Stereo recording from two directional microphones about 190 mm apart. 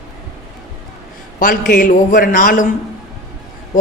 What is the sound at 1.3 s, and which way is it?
A man's voice, 45° left (ahead or behind).